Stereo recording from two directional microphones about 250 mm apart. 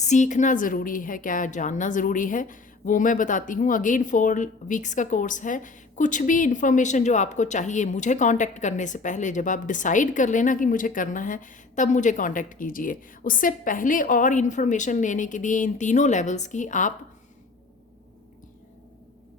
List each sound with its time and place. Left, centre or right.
0.0 s a woman's voice: left